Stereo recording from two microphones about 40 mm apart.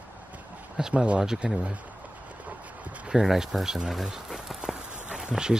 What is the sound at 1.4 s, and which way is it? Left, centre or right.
Speech, right.